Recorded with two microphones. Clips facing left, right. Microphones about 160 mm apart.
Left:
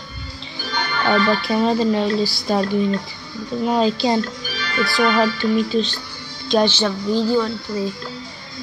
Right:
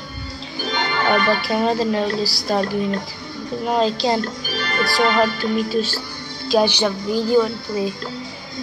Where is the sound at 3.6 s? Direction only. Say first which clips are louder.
Left 1 dB; centre (ahead or behind).